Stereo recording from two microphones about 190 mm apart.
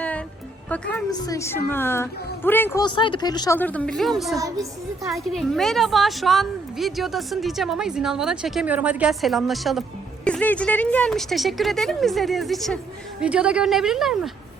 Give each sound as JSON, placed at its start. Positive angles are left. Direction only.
{"t": 0.7, "sound": "a woman's voice", "side_deg": 5}
{"t": 2.8, "sound": "a woman's voice", "side_deg": 25}
{"t": 4.4, "sound": "a woman's voice", "side_deg": -20}
{"t": 5.1, "sound": "a woman's voice", "side_deg": 0}